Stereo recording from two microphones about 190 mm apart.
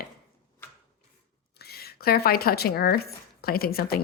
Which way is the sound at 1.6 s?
55° left (ahead or behind).